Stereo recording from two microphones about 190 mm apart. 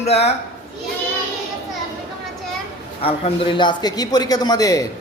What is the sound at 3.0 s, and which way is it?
A man's voice, 30° left (ahead or behind).